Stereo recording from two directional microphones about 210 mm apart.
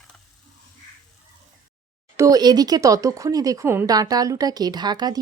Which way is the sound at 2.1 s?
15° right (ahead or behind).